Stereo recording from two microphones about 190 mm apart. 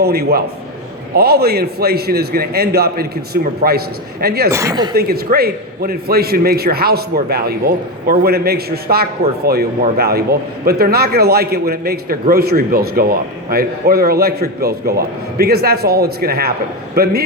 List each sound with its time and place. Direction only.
0.0 s a man's voice: 55° right (ahead or behind)
4.5 s speech: 20° right (ahead or behind)
4.9 s a man's voice: 55° right (ahead or behind)